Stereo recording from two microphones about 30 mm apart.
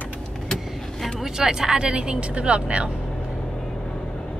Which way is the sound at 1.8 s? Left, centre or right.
Right.